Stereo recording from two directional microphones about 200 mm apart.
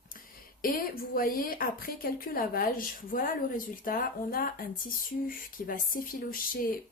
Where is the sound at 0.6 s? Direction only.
45° left (ahead or behind).